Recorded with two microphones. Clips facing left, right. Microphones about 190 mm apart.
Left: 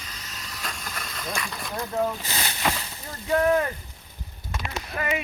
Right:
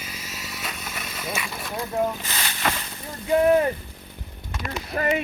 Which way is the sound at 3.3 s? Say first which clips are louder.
Right 3 dB; 20° right (ahead or behind).